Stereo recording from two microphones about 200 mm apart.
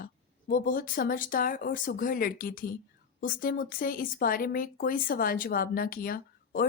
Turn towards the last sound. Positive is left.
turn(degrees=45)  # may be behind; listen again after turning